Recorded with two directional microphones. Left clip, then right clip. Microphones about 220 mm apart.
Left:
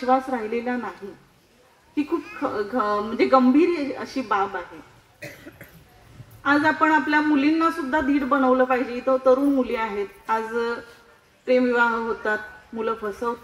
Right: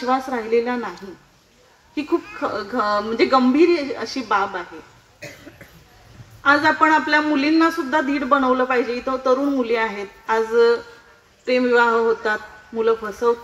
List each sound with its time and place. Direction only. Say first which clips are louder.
0.0 s a man's voice: even; 50° right (ahead or behind)
2.4 s a man's voice: left 1 dB; 50° right (ahead or behind)
5.2 s cough: right 1 dB; 25° left (ahead or behind)
6.4 s a man's voice: right 4 dB; 45° right (ahead or behind)